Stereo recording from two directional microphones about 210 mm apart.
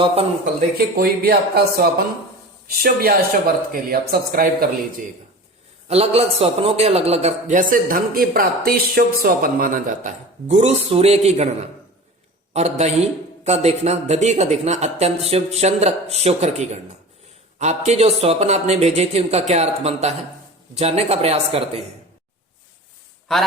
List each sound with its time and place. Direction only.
0.9 s speech: 50° right (ahead or behind)
5.9 s speech: 30° right (ahead or behind)
12.5 s speech: 30° right (ahead or behind)
23.3 s a man's voice: centre (ahead or behind)